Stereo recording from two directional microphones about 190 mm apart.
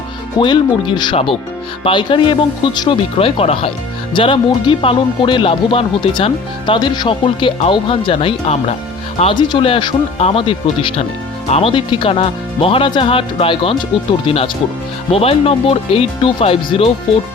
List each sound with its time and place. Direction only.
0.3 s speech: 25° left (ahead or behind)